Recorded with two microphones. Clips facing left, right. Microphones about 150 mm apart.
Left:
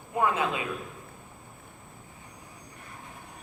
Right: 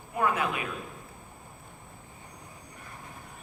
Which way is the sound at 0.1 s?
20° left (ahead or behind).